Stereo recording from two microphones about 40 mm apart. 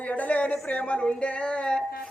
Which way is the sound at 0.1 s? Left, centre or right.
Left.